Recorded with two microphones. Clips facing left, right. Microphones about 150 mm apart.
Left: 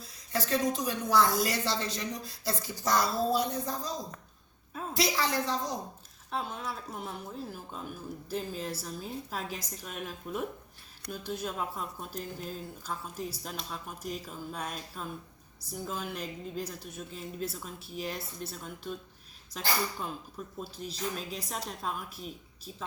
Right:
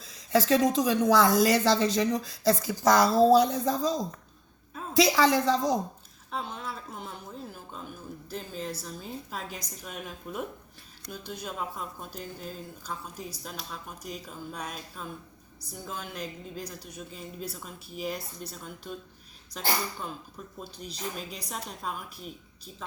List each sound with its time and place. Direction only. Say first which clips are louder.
0.0 s a woman's voice: right 9 dB; 90° right
6.3 s speech: even; centre (ahead or behind)
20.6 s speech: left 1 dB; centre (ahead or behind)